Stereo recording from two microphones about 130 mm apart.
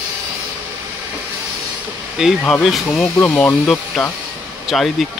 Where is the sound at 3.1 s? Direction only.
15° left (ahead or behind).